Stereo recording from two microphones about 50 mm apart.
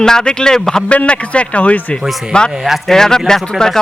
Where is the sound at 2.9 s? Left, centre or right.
Centre.